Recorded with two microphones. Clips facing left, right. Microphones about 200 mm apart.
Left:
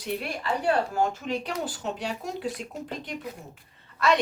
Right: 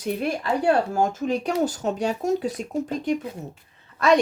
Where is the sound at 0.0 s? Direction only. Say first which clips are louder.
Right 6 dB; 45° right (ahead or behind).